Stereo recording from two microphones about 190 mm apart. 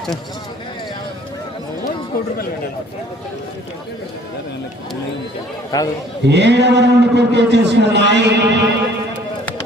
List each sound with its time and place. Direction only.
5.7 s a man's voice: 20° left (ahead or behind)
6.2 s a man's voice: 65° right (ahead or behind)